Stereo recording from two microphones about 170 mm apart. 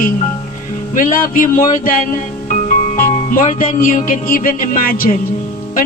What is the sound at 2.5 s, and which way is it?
Music, 50° left (ahead or behind).